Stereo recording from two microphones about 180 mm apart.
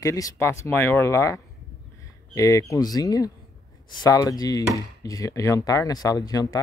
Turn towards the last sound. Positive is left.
turn(degrees=20)  # may be behind; listen again after turning